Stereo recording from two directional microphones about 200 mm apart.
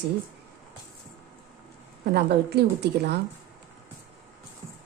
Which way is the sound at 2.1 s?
55° right (ahead or behind).